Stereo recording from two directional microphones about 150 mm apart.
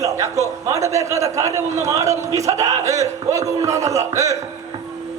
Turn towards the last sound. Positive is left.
turn(degrees=-20)  # may be behind; listen again after turning